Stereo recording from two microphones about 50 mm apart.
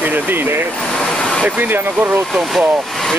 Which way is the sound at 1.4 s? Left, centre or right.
Right.